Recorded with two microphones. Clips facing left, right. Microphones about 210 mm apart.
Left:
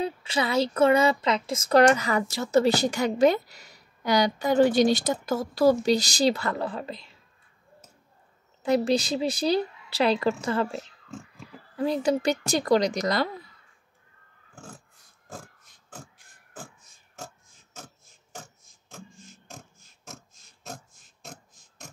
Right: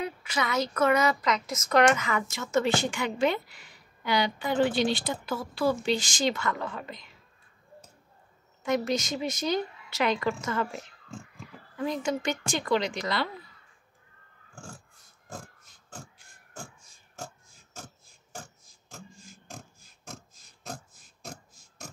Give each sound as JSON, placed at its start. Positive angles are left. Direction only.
{"t": 0.0, "sound": "speech", "side_deg": 30}
{"t": 8.6, "sound": "speech", "side_deg": 35}
{"t": 21.3, "sound": "music", "side_deg": 0}